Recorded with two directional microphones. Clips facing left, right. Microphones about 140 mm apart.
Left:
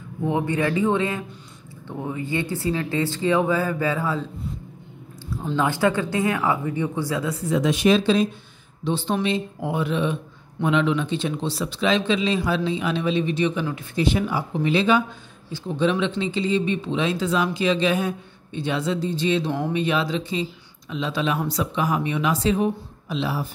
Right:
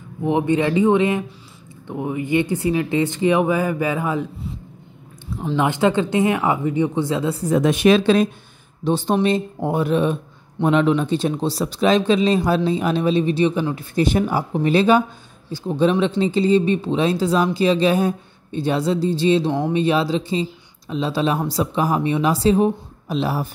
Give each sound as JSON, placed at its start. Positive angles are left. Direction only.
{"t": 0.3, "sound": "speech", "side_deg": -20}
{"t": 5.6, "sound": "speech", "side_deg": -20}
{"t": 7.5, "sound": "speech", "side_deg": -55}
{"t": 8.8, "sound": "speech", "side_deg": -40}